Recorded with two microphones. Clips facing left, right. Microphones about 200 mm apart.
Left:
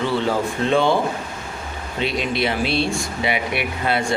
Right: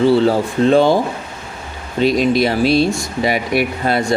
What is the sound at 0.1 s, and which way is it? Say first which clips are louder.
Speech: right 7 dB; 35° right (ahead or behind).